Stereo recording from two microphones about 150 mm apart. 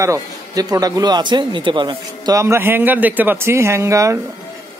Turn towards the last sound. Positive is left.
turn(degrees=-20)  # may be behind; listen again after turning